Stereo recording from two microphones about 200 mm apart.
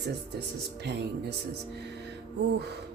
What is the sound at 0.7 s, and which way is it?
Speech, 55° right (ahead or behind).